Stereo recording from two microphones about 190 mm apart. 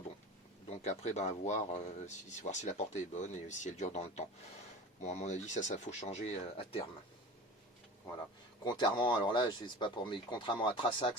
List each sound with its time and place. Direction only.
0.7 s speech: 35° left (ahead or behind)
8.6 s speech: 25° left (ahead or behind)